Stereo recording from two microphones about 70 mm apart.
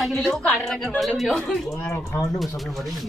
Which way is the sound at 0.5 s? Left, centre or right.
Centre.